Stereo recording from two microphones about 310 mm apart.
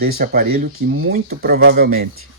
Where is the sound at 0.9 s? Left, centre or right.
Right.